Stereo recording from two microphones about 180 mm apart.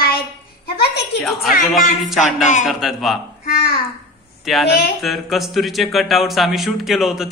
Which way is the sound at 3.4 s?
60° left (ahead or behind).